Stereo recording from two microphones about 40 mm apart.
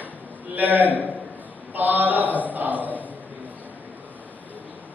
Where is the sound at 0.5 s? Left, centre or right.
Right.